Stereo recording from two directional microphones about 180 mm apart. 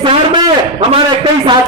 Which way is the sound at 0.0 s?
25° right (ahead or behind).